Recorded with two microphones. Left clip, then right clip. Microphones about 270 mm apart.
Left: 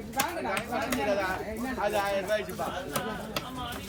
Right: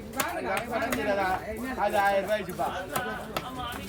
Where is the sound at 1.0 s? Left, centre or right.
Right.